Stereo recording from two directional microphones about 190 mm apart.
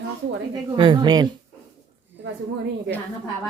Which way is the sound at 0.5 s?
25° right (ahead or behind).